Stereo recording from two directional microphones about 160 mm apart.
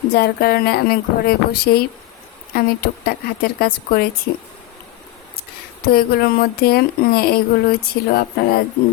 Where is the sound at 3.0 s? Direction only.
75° left (ahead or behind).